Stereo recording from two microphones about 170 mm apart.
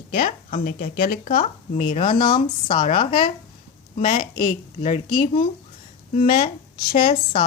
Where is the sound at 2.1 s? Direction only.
55° left (ahead or behind).